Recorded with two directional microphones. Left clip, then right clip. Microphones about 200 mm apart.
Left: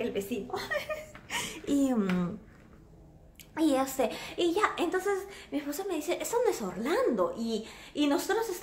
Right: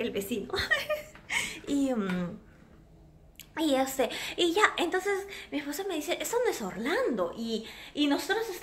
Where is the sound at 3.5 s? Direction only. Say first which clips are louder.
Even; centre (ahead or behind).